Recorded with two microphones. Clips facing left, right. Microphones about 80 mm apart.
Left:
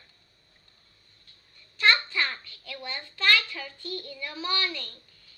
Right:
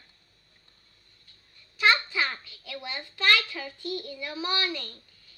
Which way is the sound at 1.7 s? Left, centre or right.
Centre.